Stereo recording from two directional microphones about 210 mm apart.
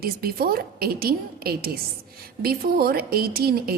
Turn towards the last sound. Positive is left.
turn(degrees=-45)  # may be behind; listen again after turning